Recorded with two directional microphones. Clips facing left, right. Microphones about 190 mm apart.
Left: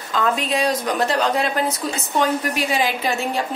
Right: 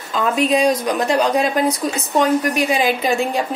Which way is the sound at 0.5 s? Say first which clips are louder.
Right 5 dB; 15° right (ahead or behind).